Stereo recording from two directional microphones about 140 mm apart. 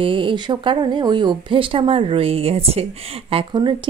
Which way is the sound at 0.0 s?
40° right (ahead or behind).